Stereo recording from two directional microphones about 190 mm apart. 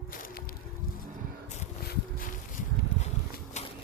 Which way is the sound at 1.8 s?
50° left (ahead or behind).